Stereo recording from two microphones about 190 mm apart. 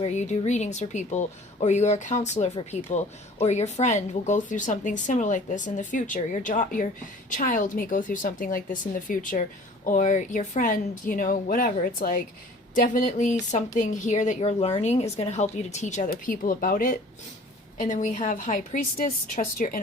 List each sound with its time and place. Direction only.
0.0 s speech: 40° left (ahead or behind)